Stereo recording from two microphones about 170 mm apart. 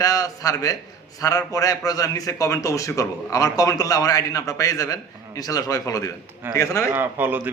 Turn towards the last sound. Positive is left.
turn(degrees=-10)  # may be behind; listen again after turning